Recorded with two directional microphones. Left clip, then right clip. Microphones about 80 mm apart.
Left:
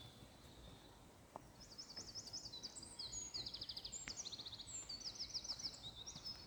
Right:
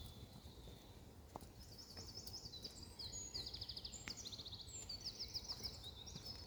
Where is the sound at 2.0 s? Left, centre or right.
Left.